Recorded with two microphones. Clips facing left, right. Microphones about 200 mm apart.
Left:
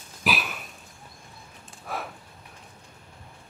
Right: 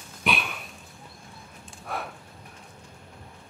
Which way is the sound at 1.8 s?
Centre (ahead or behind).